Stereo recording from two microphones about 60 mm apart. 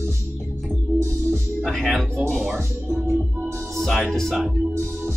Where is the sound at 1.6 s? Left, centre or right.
Centre.